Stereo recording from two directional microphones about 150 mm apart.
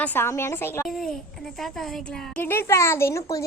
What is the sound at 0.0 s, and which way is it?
Speech, 15° left (ahead or behind).